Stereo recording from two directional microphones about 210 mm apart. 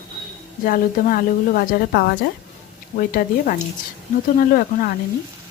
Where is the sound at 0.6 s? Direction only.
40° left (ahead or behind).